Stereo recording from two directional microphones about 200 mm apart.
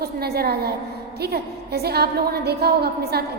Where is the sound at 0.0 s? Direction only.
50° right (ahead or behind).